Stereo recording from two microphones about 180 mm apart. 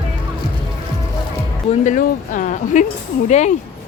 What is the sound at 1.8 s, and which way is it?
Speech, 45° left (ahead or behind).